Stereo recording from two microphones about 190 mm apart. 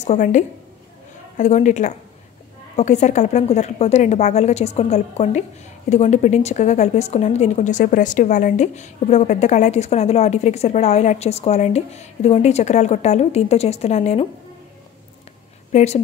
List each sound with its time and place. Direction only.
0.0 s a woman's voice: 40° left (ahead or behind)
15.7 s a woman's voice: 35° left (ahead or behind)